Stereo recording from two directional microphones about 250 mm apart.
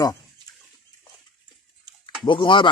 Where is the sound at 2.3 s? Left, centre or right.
Centre.